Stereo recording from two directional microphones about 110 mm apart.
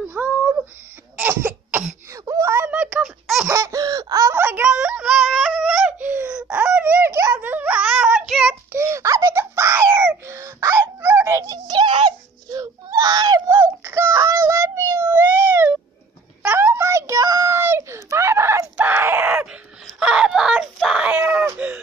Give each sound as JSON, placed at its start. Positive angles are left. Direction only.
{"t": 0.1, "sound": "a sound", "side_deg": -20}
{"t": 1.1, "sound": "cough", "side_deg": -20}
{"t": 2.1, "sound": "wail", "side_deg": -30}
{"t": 3.4, "sound": "laughter", "side_deg": -25}
{"t": 4.4, "sound": "yodeling", "side_deg": -15}
{"t": 8.3, "sound": "child singing", "side_deg": 0}
{"t": 8.7, "sound": "wail", "side_deg": -25}
{"t": 11.5, "sound": "a sound", "side_deg": -40}
{"t": 12.5, "sound": "baby cry", "side_deg": -30}
{"t": 13.6, "sound": "a sound", "side_deg": -25}
{"t": 15.0, "sound": "cat", "side_deg": -15}
{"t": 16.4, "sound": "a sound", "side_deg": -20}
{"t": 18.8, "sound": "groan", "side_deg": -15}